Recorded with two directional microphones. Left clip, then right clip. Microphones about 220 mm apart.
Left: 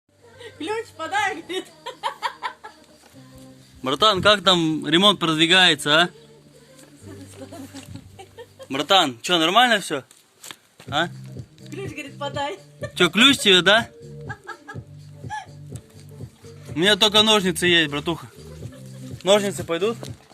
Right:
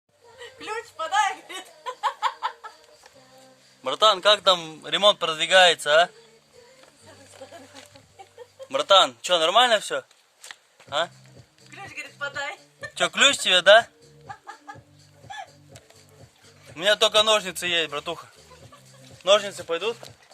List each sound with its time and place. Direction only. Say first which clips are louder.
0.6 s chuckle: left 3 dB; 20° right (ahead or behind)
3.8 s a man's voice: left 2 dB; 5° right (ahead or behind)
8.7 s speech: right 1 dB; 15° right (ahead or behind)
10.4 s a sound: left 3 dB; 35° left (ahead or behind)
10.8 s speech: left 3 dB; 10° right (ahead or behind)
12.9 s speech: left 3 dB; 5° right (ahead or behind)
16.7 s a man's voice: left 3 dB; 10° right (ahead or behind)